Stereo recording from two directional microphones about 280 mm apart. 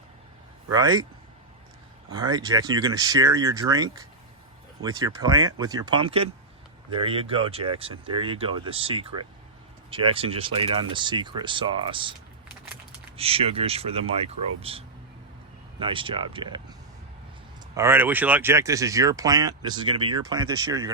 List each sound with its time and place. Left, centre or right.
0.7 s speech: centre
2.1 s speech: centre
13.1 s speech: right
17.7 s speech: centre